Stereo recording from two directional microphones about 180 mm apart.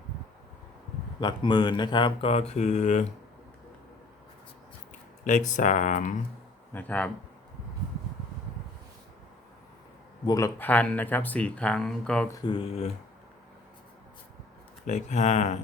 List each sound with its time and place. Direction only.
1.2 s speech: 25° left (ahead or behind)
2.5 s speech: 40° left (ahead or behind)
5.2 s speech: 45° left (ahead or behind)
6.7 s speech: 10° left (ahead or behind)
10.2 s speech: 15° left (ahead or behind)
12.3 s speech: 25° left (ahead or behind)
14.8 s speech: 40° left (ahead or behind)